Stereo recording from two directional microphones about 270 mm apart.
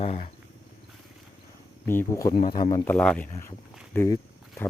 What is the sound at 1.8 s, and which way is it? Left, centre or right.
Speech, centre.